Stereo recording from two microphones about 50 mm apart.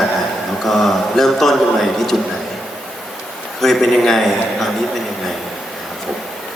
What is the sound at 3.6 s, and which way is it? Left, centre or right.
A man's voice, centre.